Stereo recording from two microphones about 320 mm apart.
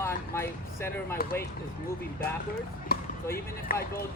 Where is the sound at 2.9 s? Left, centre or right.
Left.